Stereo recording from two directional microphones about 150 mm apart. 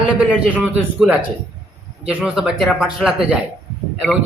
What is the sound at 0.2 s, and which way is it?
A man's voice, 5° right (ahead or behind).